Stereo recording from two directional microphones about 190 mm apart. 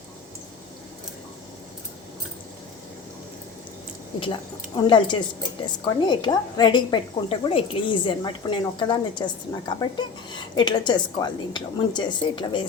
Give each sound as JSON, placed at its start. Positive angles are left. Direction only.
{"t": 4.2, "sound": "a woman's voice", "side_deg": 25}